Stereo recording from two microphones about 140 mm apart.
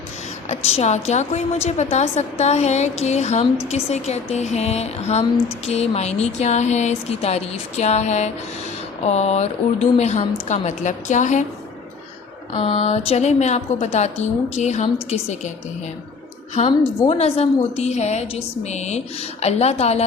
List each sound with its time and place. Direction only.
0.4 s a woman's voice: 50° left (ahead or behind)
12.5 s a woman's voice: 45° left (ahead or behind)
17.1 s a woman's voice: 45° left (ahead or behind)